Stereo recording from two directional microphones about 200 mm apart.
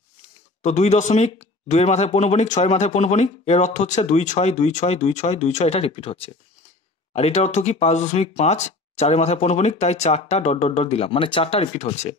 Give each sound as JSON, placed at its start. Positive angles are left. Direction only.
{"t": 0.6, "sound": "speech", "side_deg": 35}